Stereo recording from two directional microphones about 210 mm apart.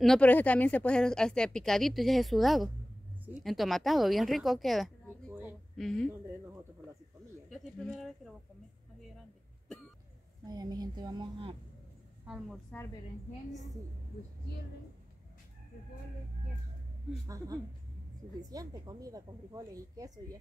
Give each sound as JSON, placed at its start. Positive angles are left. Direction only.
{"t": 0.0, "sound": "speech", "side_deg": 5}
{"t": 5.3, "sound": "a sound", "side_deg": -10}
{"t": 7.4, "sound": "speech", "side_deg": 0}
{"t": 10.4, "sound": "a woman's voice", "side_deg": -20}
{"t": 12.3, "sound": "speech", "side_deg": -5}
{"t": 18.5, "sound": "speech", "side_deg": -15}